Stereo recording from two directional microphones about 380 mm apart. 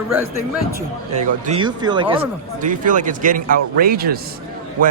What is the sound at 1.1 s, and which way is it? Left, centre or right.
Speech, centre.